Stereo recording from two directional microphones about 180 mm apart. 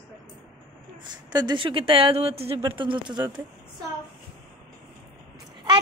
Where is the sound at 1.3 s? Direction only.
25° right (ahead or behind).